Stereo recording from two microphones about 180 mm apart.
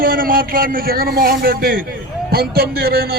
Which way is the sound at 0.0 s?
55° right (ahead or behind).